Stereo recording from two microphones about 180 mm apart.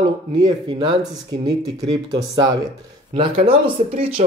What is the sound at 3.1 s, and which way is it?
Speech, 30° right (ahead or behind).